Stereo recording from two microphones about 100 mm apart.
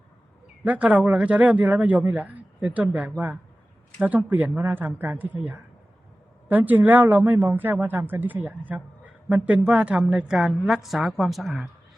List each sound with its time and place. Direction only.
0.6 s speech: 15° right (ahead or behind)